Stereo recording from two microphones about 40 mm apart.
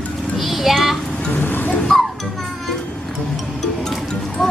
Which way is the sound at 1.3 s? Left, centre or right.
Left.